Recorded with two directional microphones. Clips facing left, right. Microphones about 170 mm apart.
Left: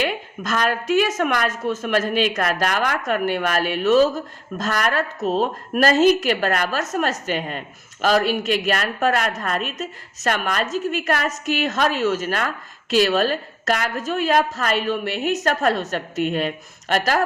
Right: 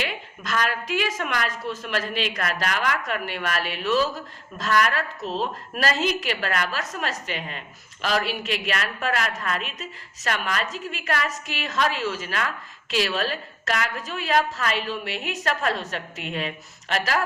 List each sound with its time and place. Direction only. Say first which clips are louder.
0.0 s a woman's voice: left 7 dB; 45° left (ahead or behind)